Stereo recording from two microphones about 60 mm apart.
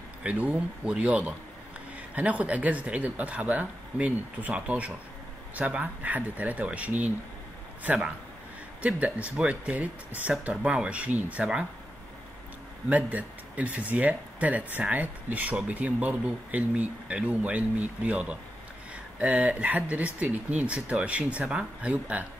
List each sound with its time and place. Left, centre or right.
0.2 s speech: right
12.9 s speech: right